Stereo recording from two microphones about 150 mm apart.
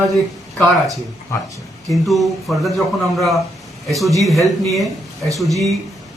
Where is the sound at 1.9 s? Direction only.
Centre (ahead or behind).